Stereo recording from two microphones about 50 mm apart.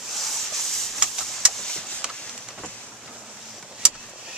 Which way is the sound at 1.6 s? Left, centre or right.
Centre.